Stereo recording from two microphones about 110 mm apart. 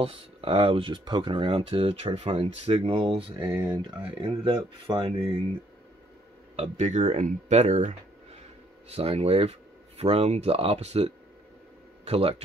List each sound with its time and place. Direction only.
0.0 s speech: 55° right (ahead or behind)
3.6 s speech: 40° right (ahead or behind)
4.0 s speech: 55° right (ahead or behind)
6.5 s speech: 80° right
8.8 s speech: 65° right (ahead or behind)